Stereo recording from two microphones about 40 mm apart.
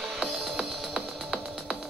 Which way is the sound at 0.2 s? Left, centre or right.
Centre.